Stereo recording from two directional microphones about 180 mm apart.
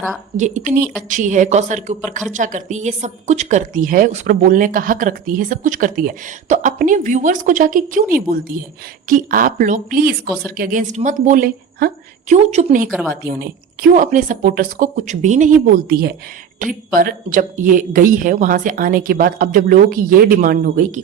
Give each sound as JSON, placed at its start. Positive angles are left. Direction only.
{"t": 0.3, "sound": "a woman's voice", "side_deg": -45}
{"t": 12.3, "sound": "speech", "side_deg": -35}
{"t": 12.9, "sound": "speech", "side_deg": 5}
{"t": 13.2, "sound": "a woman's voice", "side_deg": -55}